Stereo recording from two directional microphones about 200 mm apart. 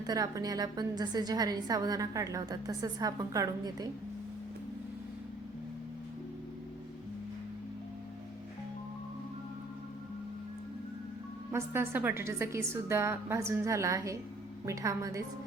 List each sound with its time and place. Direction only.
0.0 s a woman's voice: 20° right (ahead or behind)
11.5 s a woman's voice: 10° right (ahead or behind)